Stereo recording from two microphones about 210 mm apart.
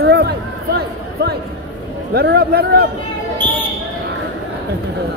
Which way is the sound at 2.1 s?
50° right (ahead or behind).